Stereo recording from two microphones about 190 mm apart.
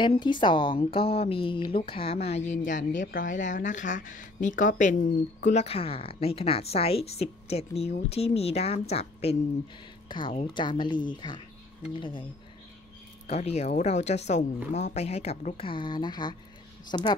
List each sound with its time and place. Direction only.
0.0 s speech: 25° left (ahead or behind)
13.3 s speech: 35° left (ahead or behind)